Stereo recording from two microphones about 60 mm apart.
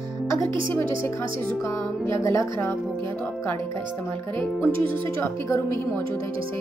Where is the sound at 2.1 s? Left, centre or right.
Left.